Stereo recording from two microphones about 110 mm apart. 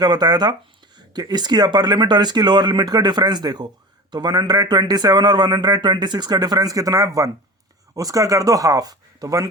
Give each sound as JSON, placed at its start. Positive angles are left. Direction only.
{"t": 0.0, "sound": "a man's voice", "side_deg": -40}